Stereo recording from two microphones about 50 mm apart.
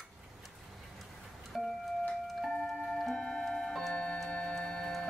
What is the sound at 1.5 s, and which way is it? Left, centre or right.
Music, centre.